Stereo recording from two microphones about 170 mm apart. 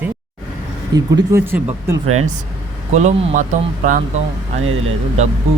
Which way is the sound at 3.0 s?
45° right (ahead or behind).